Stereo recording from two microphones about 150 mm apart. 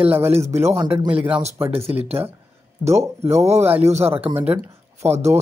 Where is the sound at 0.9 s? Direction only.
40° right (ahead or behind).